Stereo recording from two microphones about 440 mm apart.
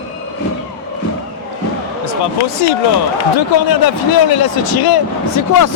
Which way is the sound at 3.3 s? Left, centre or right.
Left.